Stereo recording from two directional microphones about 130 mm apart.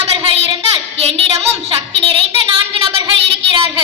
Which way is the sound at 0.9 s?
50° right (ahead or behind).